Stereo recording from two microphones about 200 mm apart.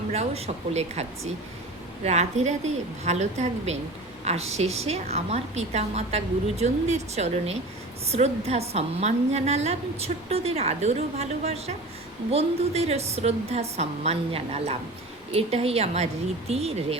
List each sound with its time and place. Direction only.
0.1 s a woman's voice: 30° right (ahead or behind)